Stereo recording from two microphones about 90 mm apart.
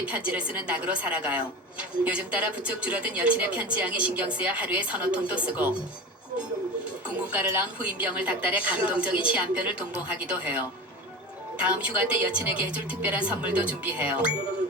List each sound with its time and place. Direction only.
0.0 s speech: 15° right (ahead or behind)
7.2 s speech: 15° right (ahead or behind)
11.6 s speech: 15° right (ahead or behind)